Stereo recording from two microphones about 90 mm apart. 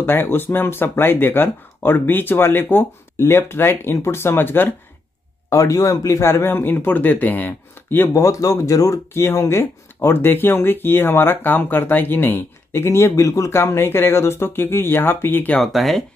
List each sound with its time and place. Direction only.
0.0 s speech: 25° left (ahead or behind)
5.5 s speech: 35° left (ahead or behind); by 8.1 s 20° left (ahead or behind)
8.1 s speech: 35° left (ahead or behind)
15.5 s speech: centre (ahead or behind)